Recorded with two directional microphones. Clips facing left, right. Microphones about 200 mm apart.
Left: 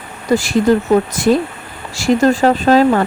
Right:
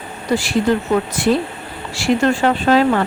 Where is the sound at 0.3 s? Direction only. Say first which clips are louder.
Left 4 dB; 45° left (ahead or behind).